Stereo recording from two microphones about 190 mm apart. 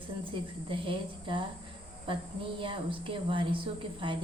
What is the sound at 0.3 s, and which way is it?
A woman's voice, 25° right (ahead or behind).